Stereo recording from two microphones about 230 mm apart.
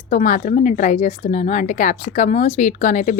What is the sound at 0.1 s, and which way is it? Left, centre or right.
Speech, left.